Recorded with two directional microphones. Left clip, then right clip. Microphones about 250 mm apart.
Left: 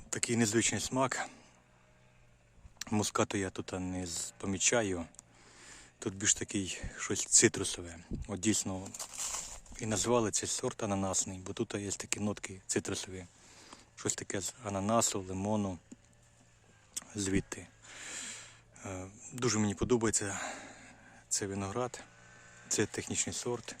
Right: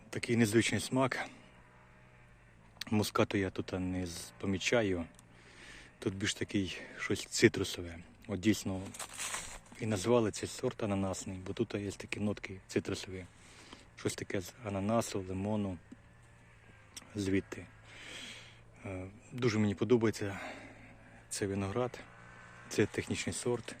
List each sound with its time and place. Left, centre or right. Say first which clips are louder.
0.1 s speech: right 1 dB; centre
2.7 s speech: even; centre
9.0 s speech: even; centre
9.7 s speech: even; centre
16.9 s a sound: even; centre
22.4 s a sound: right 1 dB; left
22.7 s speech: right 1 dB; centre